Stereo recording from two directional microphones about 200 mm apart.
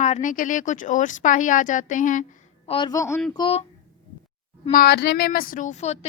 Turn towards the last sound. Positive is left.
turn(degrees=35)  # may be behind; listen again after turning